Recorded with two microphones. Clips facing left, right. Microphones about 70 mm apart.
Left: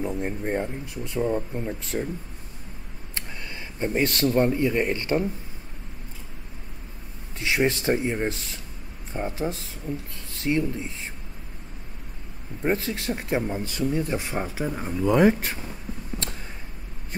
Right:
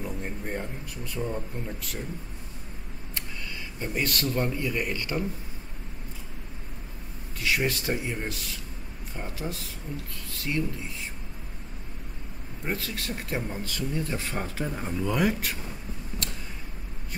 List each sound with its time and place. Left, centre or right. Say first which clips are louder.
0.0 s speech: left 6 dB; left
3.8 s speech: left 6 dB; left
7.3 s speech: left 4 dB; left
12.6 s speech: left 7 dB; left; by 15.0 s centre
15.0 s speech: left 8 dB; left